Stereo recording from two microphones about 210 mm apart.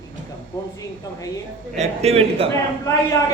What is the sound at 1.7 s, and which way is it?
Speech, 30° right (ahead or behind).